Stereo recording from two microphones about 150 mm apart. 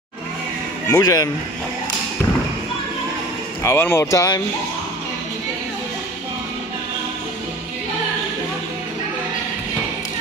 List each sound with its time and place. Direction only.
0.8 s speech: 25° left (ahead or behind)
3.6 s speech: 15° left (ahead or behind)